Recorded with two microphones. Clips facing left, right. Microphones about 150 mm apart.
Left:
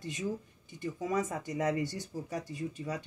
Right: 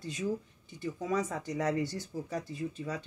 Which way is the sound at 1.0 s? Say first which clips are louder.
Even; 45° left (ahead or behind).